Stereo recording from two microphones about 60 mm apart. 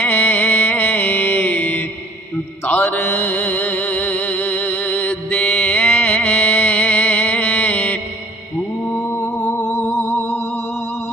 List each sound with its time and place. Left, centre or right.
0.0 s music: left
9.0 s music: left